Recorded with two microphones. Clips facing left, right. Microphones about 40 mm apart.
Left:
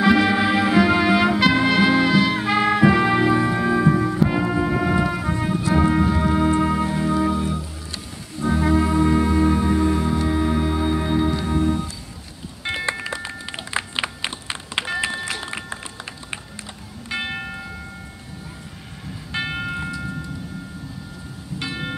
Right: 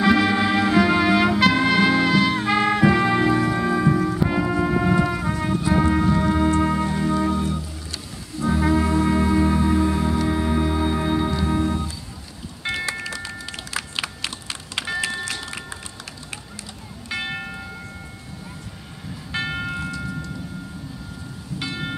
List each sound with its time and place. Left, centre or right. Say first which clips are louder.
0.0 s music: left 1 dB; centre
12.9 s a sound: left 1 dB; left
13.7 s music: left 3 dB; left
17.1 s music: left 1 dB; centre
19.3 s music: even; centre
21.5 s music: left 1 dB; centre